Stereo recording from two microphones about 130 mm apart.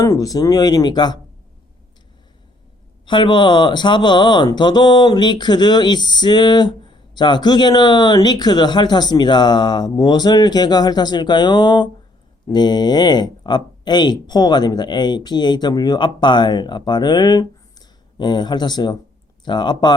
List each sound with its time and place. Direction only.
0.0 s speech: 25° left (ahead or behind)
3.1 s speech: 35° left (ahead or behind)